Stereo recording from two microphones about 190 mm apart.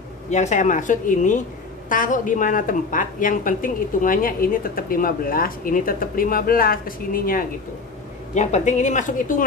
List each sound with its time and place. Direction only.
0.3 s a woman's voice: 40° left (ahead or behind)